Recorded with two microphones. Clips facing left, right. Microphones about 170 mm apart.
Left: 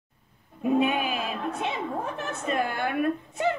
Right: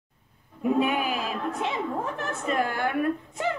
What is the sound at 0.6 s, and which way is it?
A woman's voice, 20° left (ahead or behind).